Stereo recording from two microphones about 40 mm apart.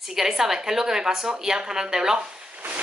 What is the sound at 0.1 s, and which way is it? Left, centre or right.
A woman's voice, centre.